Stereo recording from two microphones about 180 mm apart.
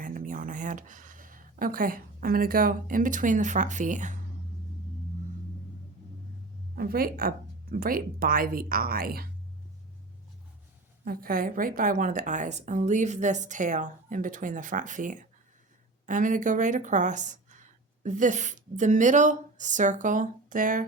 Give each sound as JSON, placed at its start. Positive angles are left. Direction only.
{"t": 0.0, "sound": "speech", "side_deg": -50}
{"t": 6.7, "sound": "a woman's voice", "side_deg": -55}
{"t": 11.0, "sound": "a woman's voice", "side_deg": -55}